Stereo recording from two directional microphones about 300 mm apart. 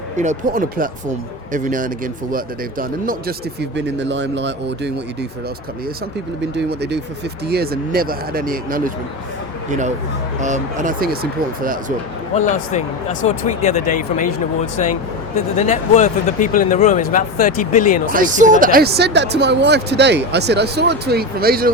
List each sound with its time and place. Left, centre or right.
0.2 s speech: right
6.5 s speech: right
10.4 s speech: right
12.5 s speech: left
18.1 s speech: right